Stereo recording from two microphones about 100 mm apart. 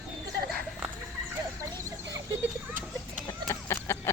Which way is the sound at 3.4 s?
30° left (ahead or behind).